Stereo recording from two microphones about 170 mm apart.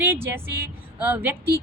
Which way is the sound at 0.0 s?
15° right (ahead or behind).